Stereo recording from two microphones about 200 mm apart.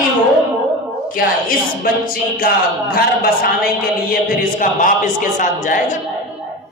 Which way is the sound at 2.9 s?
50° left (ahead or behind).